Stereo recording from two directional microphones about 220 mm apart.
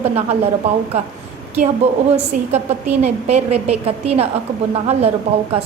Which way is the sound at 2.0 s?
30° right (ahead or behind).